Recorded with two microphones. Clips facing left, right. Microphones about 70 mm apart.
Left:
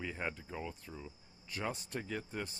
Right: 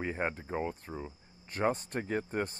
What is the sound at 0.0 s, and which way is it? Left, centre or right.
Speech, right.